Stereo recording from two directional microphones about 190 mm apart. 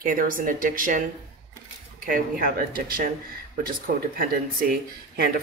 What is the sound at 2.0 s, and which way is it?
Speech, 50° right (ahead or behind).